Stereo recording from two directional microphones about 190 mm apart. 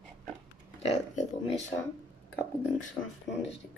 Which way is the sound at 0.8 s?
35° left (ahead or behind).